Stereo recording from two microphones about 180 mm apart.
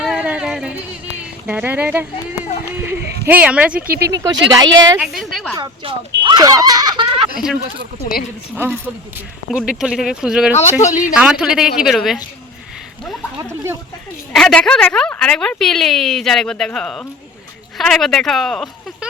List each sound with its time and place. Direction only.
0.0 s a sound: 5° right (ahead or behind)
1.2 s speech: 10° right (ahead or behind)
4.0 s speech: 20° right (ahead or behind)
4.9 s a woman's voice: centre (ahead or behind)
5.5 s speech: 25° right (ahead or behind)
9.5 s a woman's voice: 5° right (ahead or behind)
10.6 s a man's voice: 40° left (ahead or behind)
11.1 s a woman's voice: 5° right (ahead or behind)
14.3 s a woman's voice: 5° left (ahead or behind)